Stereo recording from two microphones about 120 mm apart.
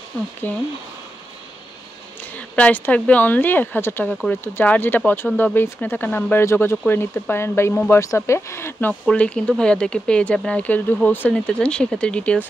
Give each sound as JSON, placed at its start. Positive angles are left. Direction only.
{"t": 0.4, "sound": "speech", "side_deg": 15}
{"t": 2.3, "sound": "speech", "side_deg": 10}
{"t": 9.0, "sound": "speech", "side_deg": 10}